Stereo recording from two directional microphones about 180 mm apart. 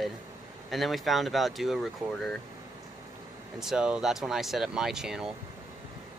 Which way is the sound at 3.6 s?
5° right (ahead or behind).